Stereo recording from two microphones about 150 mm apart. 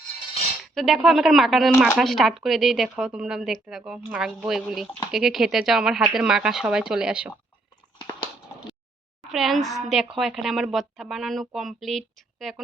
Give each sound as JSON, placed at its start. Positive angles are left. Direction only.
{"t": 0.7, "sound": "speech", "side_deg": 0}
{"t": 7.9, "sound": "a sound", "side_deg": 25}
{"t": 9.2, "sound": "speech", "side_deg": 0}